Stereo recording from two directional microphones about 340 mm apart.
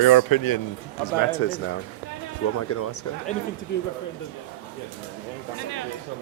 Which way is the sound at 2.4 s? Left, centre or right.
Left.